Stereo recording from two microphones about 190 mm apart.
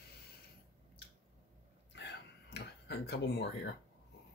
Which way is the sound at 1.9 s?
65° left (ahead or behind).